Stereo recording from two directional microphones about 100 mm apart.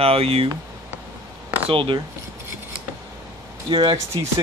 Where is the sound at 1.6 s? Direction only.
60° right (ahead or behind).